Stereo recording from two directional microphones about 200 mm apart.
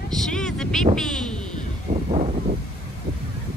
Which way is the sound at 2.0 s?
35° right (ahead or behind).